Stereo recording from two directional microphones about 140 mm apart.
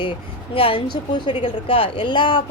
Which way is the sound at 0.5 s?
40° left (ahead or behind).